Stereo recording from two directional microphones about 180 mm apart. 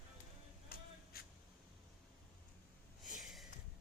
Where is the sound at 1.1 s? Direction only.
55° left (ahead or behind).